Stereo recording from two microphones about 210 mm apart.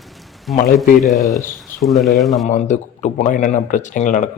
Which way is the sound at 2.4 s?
35° left (ahead or behind).